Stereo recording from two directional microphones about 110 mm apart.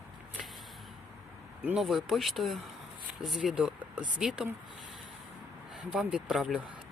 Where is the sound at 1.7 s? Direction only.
Centre (ahead or behind).